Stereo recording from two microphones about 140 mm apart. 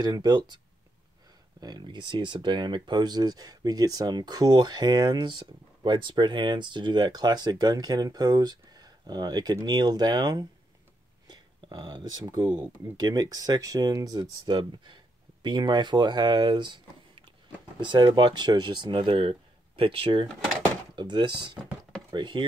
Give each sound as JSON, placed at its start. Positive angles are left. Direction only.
{"t": 0.0, "sound": "speech", "side_deg": -25}
{"t": 1.6, "sound": "speech", "side_deg": -30}
{"t": 12.5, "sound": "speech", "side_deg": -15}
{"t": 13.0, "sound": "speech", "side_deg": -25}